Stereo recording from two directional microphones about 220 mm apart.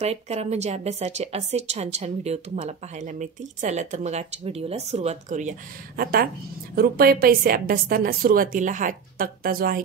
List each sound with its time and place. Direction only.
0.0 s a woman's voice: 30° right (ahead or behind)